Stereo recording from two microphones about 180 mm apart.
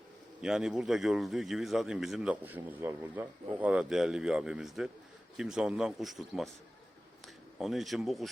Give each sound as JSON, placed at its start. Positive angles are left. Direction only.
{"t": 0.4, "sound": "a man's voice", "side_deg": -5}
{"t": 7.6, "sound": "a man's voice", "side_deg": 0}